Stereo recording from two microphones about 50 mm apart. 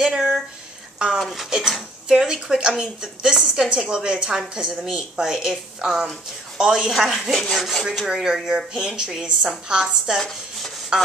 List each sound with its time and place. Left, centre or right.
0.0 s speech: centre
0.9 s a sound: centre
1.2 s speech: centre
1.5 s a woman's voice: centre
7.0 s a woman's voice: centre